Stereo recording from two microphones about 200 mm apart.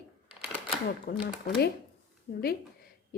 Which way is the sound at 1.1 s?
50° left (ahead or behind).